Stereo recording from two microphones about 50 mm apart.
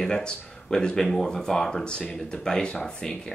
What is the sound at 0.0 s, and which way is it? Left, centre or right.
Speech, centre.